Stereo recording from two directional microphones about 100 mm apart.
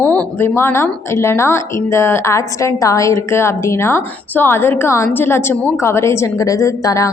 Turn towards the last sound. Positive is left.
turn(degrees=30)  # may be behind; listen again after turning